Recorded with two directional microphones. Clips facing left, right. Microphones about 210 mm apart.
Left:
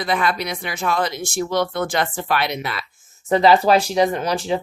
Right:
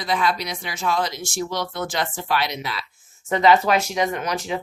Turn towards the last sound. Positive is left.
turn(degrees=30)  # may be behind; listen again after turning